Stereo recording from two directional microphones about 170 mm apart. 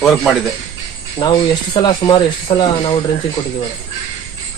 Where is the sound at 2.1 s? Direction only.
30° left (ahead or behind).